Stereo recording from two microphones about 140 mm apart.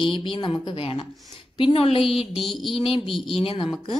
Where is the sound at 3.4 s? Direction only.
40° left (ahead or behind).